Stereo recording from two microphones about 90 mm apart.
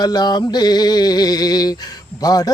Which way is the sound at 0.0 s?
50° left (ahead or behind).